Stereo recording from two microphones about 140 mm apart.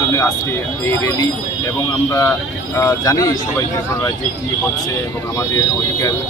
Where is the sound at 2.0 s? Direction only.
20° left (ahead or behind).